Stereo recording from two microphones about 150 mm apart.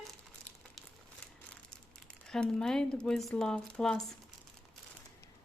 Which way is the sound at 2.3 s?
5° left (ahead or behind).